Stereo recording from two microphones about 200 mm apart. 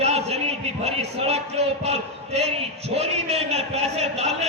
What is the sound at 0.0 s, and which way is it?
A man's voice, 30° right (ahead or behind).